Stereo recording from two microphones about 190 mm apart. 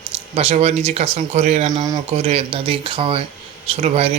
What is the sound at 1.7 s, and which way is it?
Speech, 20° right (ahead or behind).